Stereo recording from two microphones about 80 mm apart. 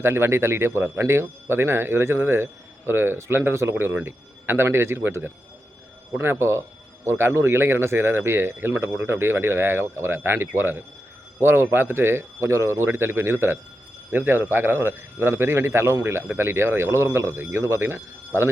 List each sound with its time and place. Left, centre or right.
0.0 s speech: right